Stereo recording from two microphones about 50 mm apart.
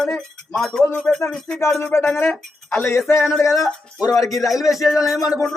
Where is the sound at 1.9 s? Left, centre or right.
Left.